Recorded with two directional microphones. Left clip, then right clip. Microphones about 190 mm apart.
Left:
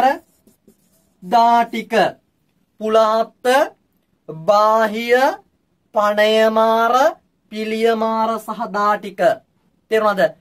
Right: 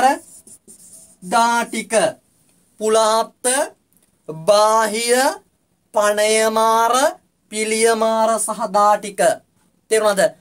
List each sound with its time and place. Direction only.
1.3 s speech: 10° right (ahead or behind)
2.8 s speech: 20° right (ahead or behind)